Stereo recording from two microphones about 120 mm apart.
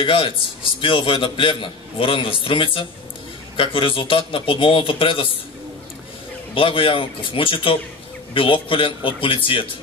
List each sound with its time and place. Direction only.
0.0 s a man's voice: 45° left (ahead or behind)
6.5 s a man's voice: 50° left (ahead or behind)